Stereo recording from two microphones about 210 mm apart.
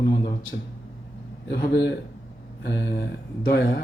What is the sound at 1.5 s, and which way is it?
Speech, 50° left (ahead or behind).